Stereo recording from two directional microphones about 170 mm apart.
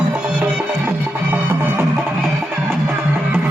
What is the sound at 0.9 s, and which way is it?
Music, 10° right (ahead or behind).